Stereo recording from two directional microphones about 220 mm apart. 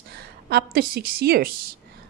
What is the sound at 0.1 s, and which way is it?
A woman's voice, 45° right (ahead or behind).